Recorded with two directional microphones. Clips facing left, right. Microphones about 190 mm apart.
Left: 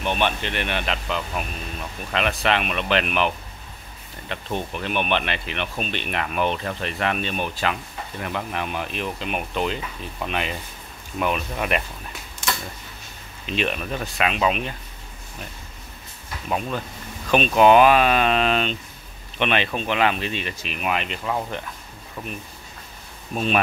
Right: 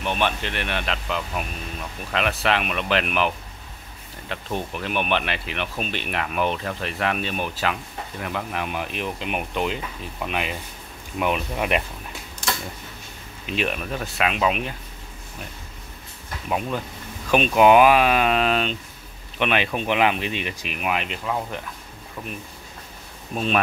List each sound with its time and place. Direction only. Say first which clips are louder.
0.0 s speech: left 1 dB; centre (ahead or behind)
11.1 s speech: right 1 dB; 15° right (ahead or behind)
13.5 s speech: left 1 dB; 5° right (ahead or behind)
16.4 s speech: even; 10° right (ahead or behind)
23.3 s speech: left 1 dB; centre (ahead or behind)